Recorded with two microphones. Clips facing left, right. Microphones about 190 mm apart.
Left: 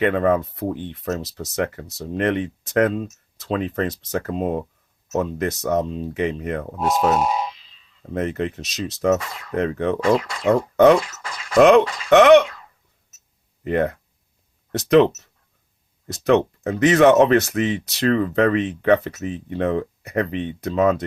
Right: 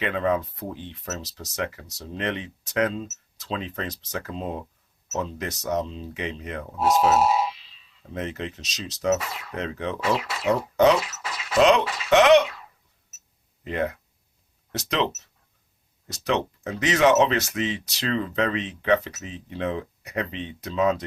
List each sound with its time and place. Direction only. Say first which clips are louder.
0.0 s speech: left 6 dB; 50° left (ahead or behind)
7.1 s a sound: even; 5° right (ahead or behind)
8.1 s speech: left 7 dB; 55° left (ahead or behind)
9.2 s speech: even; 5° right (ahead or behind)
9.6 s speech: left 9 dB; 55° left (ahead or behind)
10.2 s speech: left 4 dB; 5° right (ahead or behind)
10.9 s a sound: left 6 dB; 5° right (ahead or behind)
11.5 s speech: left 6 dB; 55° left (ahead or behind)
13.7 s speech: left 6 dB; 50° left (ahead or behind)